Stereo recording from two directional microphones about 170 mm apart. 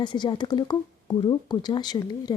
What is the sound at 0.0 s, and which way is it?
Speech, 25° left (ahead or behind).